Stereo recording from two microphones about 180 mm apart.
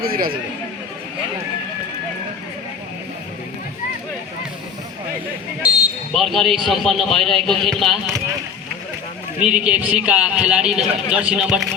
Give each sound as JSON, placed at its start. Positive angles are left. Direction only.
{"t": 0.0, "sound": "a man's voice", "side_deg": -55}
{"t": 6.1, "sound": "a man's voice", "side_deg": 0}
{"t": 9.4, "sound": "a man's voice", "side_deg": -5}